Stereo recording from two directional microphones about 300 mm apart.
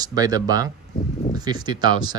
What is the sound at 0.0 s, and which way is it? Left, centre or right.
Speech, centre.